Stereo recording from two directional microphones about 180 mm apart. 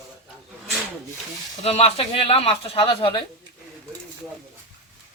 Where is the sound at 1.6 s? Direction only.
35° left (ahead or behind).